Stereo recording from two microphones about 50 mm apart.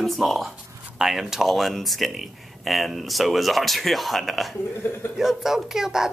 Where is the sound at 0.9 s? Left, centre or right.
Centre.